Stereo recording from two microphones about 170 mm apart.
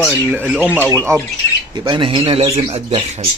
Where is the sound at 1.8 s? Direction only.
30° right (ahead or behind).